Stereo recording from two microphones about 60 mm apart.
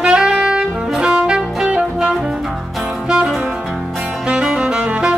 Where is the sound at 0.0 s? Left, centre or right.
Centre.